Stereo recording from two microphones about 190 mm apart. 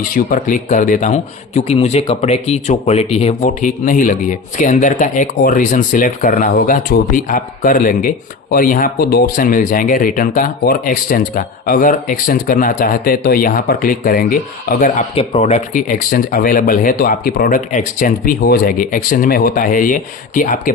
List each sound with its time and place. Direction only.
0.1 s speech: 45° left (ahead or behind)